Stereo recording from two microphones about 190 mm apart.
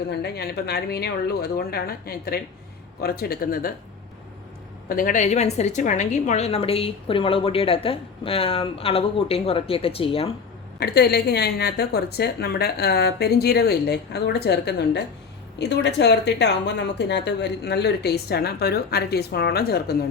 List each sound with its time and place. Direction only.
0.1 s a woman's voice: 60° left (ahead or behind)
4.9 s a woman's voice: 45° left (ahead or behind); by 10.3 s 30° left (ahead or behind)
10.8 s a woman's voice: 60° left (ahead or behind)